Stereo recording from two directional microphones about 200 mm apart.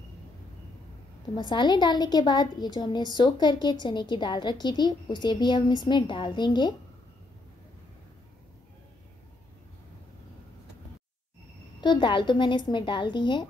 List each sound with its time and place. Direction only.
1.3 s a woman's voice: 20° left (ahead or behind)
11.8 s a woman's voice: 25° left (ahead or behind)